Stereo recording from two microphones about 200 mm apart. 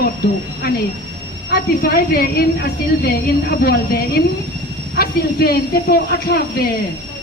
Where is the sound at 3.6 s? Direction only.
50° left (ahead or behind).